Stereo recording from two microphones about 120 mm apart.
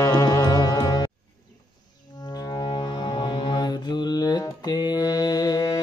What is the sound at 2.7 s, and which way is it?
Music, 45° left (ahead or behind).